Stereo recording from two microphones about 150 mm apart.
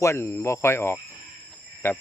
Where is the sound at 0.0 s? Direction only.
20° left (ahead or behind).